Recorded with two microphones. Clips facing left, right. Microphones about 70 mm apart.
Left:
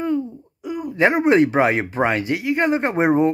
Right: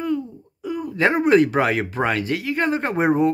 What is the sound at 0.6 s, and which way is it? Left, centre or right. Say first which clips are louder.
Speech: left 2 dB; centre.